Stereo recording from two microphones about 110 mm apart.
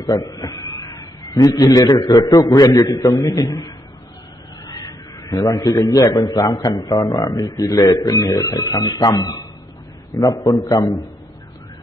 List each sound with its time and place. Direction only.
0.0 s a man's voice: 35° left (ahead or behind)